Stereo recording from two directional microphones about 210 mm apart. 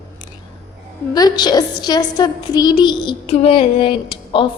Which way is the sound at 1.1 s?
20° left (ahead or behind).